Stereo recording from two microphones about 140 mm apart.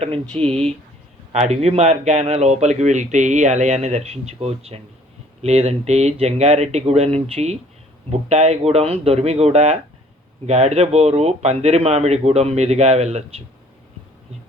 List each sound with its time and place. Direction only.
0.0 s speech: 45° right (ahead or behind)